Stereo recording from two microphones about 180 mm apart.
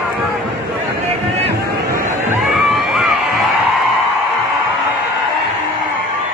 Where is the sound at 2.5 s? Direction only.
Centre (ahead or behind).